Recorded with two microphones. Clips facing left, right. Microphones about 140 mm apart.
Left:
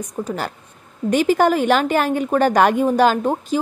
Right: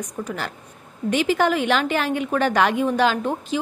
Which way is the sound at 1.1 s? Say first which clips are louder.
Left 4 dB; 45° left (ahead or behind).